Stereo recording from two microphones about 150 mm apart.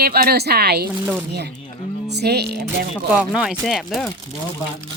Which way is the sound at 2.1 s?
90° right.